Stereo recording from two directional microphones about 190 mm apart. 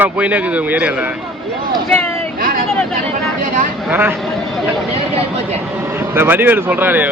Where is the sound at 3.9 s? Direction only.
10° right (ahead or behind).